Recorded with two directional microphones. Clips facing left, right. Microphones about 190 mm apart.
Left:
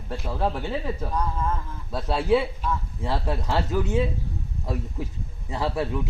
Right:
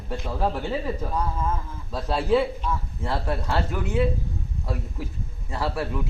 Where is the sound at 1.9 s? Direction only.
5° left (ahead or behind).